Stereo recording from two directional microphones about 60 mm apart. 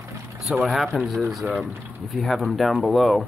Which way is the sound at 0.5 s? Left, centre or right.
Centre.